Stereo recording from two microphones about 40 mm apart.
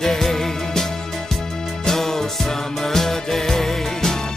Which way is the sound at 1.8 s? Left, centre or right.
Centre.